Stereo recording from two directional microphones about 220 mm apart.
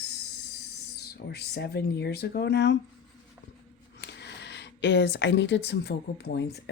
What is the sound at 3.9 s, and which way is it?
Speech, 50° left (ahead or behind).